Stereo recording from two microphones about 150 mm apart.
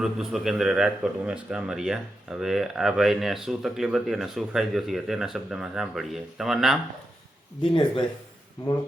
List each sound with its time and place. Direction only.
0.0 s speech: 5° right (ahead or behind)
7.6 s speech: 35° left (ahead or behind)